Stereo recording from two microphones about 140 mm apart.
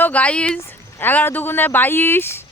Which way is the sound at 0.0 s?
10° left (ahead or behind).